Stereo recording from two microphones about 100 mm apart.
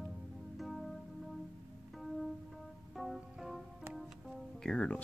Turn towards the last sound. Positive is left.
turn(degrees=10)  # may be behind; listen again after turning